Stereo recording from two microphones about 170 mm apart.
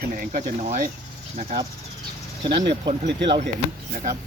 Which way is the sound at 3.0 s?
90° right.